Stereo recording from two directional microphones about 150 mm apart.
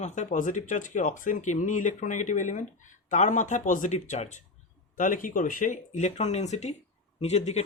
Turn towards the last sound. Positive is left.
turn(degrees=45)  # may be behind; listen again after turning